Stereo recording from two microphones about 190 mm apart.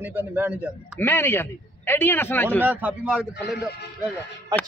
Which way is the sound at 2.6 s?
10° right (ahead or behind).